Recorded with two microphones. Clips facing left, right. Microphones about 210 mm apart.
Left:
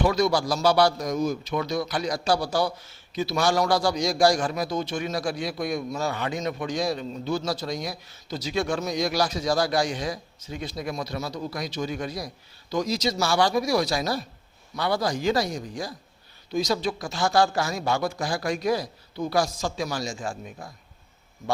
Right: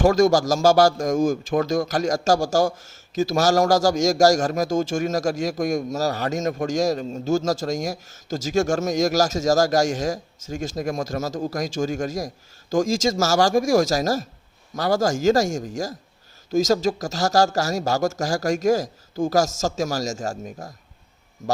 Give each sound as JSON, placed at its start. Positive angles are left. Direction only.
{"t": 0.0, "sound": "speech", "side_deg": -45}